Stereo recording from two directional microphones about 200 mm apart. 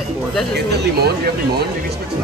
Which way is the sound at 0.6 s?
55° right (ahead or behind).